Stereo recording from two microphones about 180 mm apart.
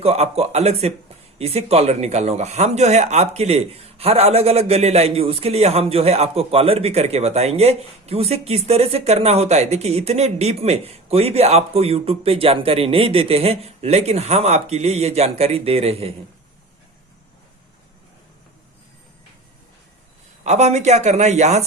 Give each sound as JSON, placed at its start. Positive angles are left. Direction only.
{"t": 0.0, "sound": "speech", "side_deg": -35}
{"t": 20.4, "sound": "speech", "side_deg": -40}